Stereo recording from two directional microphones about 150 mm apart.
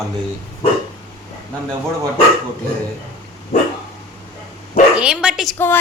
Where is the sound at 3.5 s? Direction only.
45° left (ahead or behind).